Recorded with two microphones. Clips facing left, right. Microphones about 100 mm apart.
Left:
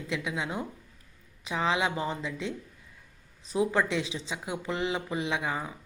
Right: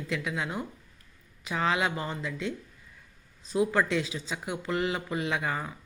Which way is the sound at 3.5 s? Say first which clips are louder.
Right 1 dB; 20° left (ahead or behind).